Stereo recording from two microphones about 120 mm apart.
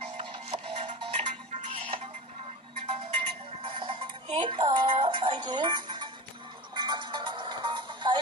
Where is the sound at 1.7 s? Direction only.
55° right (ahead or behind).